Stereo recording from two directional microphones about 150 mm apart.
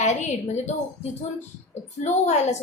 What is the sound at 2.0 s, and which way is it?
Speech, 50° left (ahead or behind).